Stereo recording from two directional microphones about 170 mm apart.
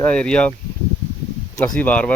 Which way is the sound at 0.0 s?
5° left (ahead or behind).